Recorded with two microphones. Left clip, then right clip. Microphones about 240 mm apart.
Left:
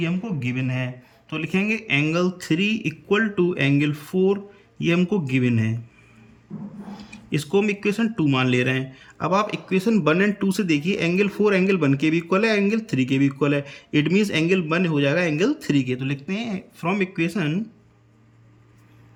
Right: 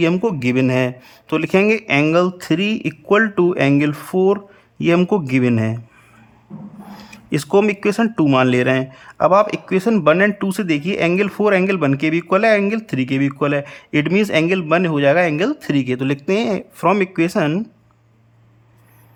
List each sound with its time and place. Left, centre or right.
0.0 s a man's voice: right
7.3 s speech: centre